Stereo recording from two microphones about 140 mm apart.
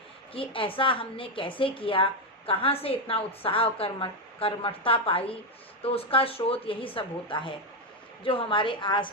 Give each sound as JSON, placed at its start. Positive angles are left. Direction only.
{"t": 0.3, "sound": "a woman's voice", "side_deg": 40}